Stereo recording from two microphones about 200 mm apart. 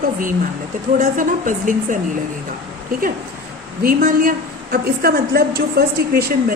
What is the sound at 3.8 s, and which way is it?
A woman's voice, 45° right (ahead or behind).